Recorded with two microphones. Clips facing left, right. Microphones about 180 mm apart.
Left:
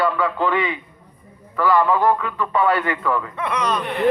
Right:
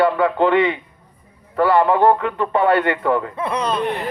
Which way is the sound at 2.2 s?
60° right (ahead or behind).